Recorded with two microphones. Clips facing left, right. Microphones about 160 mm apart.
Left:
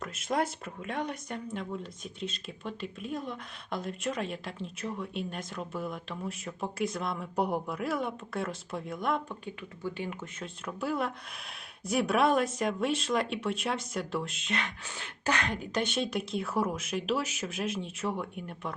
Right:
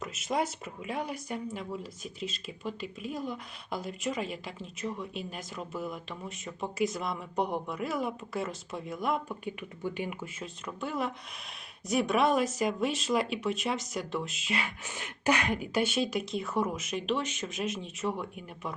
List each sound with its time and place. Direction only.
0.0 s speech: centre (ahead or behind)
10.4 s speech: centre (ahead or behind)